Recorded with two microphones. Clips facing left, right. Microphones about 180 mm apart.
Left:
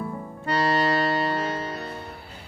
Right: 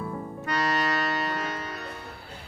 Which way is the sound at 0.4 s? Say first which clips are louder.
Left 5 dB; 30° left (ahead or behind).